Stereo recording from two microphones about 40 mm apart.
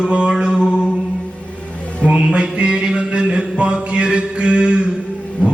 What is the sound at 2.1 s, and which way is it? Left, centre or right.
Mantra, right.